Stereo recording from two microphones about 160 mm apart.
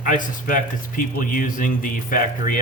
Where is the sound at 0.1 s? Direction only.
55° left (ahead or behind).